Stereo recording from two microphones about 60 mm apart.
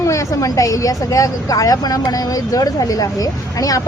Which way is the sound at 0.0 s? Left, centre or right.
Left.